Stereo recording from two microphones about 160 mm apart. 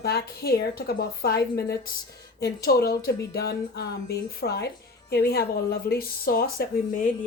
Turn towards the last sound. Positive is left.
turn(degrees=70)  # may be behind; listen again after turning